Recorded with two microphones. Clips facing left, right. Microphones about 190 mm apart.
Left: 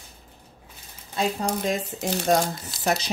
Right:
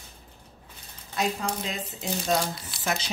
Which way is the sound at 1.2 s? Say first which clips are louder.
Left 3 dB; 35° left (ahead or behind).